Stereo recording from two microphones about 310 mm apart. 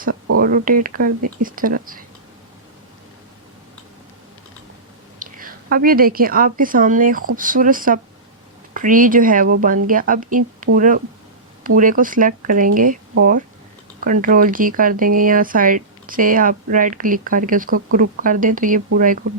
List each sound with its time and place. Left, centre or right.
0.3 s speech: right
5.2 s a woman's voice: right